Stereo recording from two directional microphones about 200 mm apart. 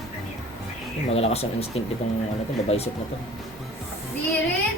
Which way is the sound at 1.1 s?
30° left (ahead or behind).